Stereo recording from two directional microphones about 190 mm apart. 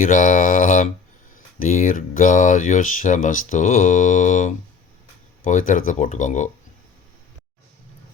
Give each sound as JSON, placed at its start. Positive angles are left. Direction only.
{"t": 0.0, "sound": "speech", "side_deg": 45}